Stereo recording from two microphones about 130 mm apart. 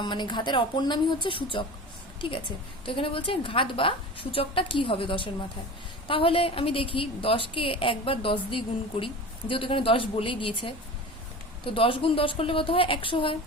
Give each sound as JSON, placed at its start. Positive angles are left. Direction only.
{"t": 0.0, "sound": "a woman's voice", "side_deg": 35}